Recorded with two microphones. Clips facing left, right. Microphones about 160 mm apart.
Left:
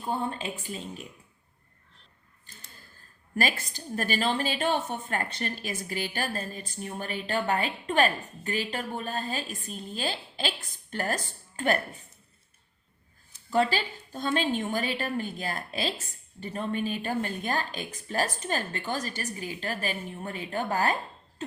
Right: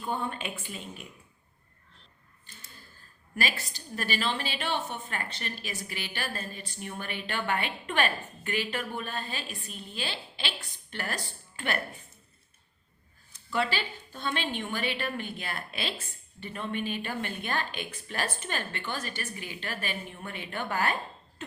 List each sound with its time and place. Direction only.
0.0 s speech: 35° left (ahead or behind)
3.3 s a woman's voice: 45° left (ahead or behind)
13.5 s speech: 40° left (ahead or behind)